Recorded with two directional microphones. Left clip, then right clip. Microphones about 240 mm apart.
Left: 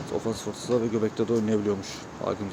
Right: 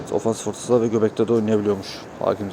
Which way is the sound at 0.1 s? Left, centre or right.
Centre.